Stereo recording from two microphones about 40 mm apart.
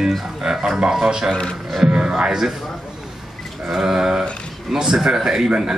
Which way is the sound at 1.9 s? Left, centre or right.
Right.